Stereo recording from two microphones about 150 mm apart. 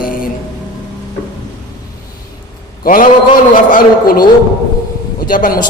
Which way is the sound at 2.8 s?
70° left (ahead or behind).